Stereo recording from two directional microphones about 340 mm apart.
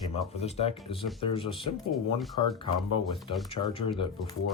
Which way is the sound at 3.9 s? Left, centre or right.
Centre.